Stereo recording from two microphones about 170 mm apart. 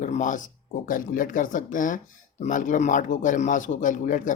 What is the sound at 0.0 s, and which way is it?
Speech, 45° left (ahead or behind).